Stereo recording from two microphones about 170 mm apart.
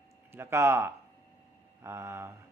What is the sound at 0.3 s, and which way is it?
Speech, 15° right (ahead or behind).